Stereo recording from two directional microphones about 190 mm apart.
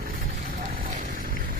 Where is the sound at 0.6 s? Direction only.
45° right (ahead or behind).